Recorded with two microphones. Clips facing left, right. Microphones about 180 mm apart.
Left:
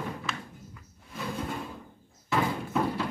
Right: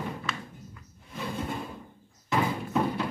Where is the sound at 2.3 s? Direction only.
Centre (ahead or behind).